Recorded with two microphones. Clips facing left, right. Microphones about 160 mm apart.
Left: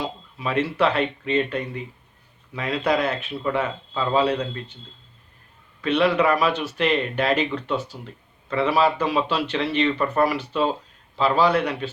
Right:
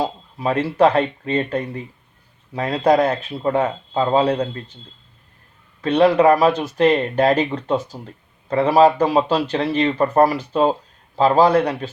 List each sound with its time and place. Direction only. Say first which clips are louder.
0.0 s speech: right 6 dB; 40° right (ahead or behind)
5.8 s speech: right 6 dB; 40° right (ahead or behind)